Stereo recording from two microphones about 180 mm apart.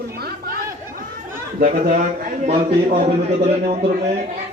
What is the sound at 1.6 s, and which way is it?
A man's voice, 45° right (ahead or behind).